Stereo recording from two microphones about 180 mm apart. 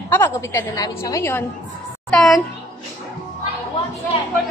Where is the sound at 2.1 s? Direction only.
Centre (ahead or behind).